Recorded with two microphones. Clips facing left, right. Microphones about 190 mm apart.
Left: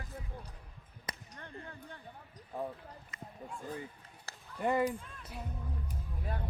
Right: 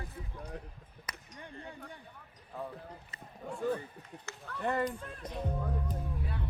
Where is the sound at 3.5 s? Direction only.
70° right (ahead or behind).